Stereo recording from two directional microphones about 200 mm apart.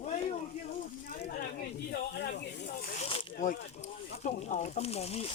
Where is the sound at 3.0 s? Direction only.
30° left (ahead or behind).